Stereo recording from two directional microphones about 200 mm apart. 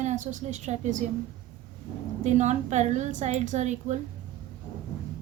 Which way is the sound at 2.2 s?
35° right (ahead or behind).